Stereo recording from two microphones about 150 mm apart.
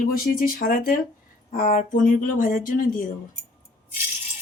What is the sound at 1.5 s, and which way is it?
Speech, 60° left (ahead or behind).